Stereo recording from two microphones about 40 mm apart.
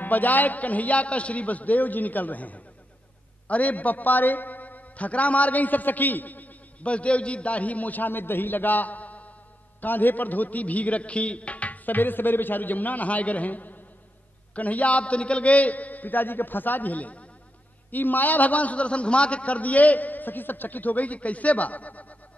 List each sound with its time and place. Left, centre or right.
0.0 s a man's voice: left
6.8 s a man's voice: left
17.9 s a man's voice: left